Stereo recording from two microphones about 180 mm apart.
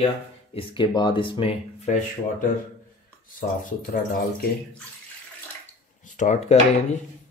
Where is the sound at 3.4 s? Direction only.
50° left (ahead or behind).